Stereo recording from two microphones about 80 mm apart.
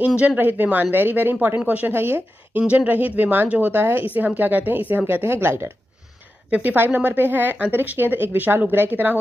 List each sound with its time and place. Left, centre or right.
0.4 s speech: right
2.6 s speech: centre